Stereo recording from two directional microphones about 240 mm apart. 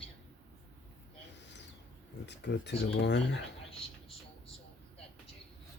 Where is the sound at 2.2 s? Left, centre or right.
Left.